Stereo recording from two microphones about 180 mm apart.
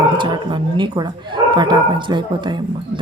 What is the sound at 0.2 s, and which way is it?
Speech, 25° right (ahead or behind).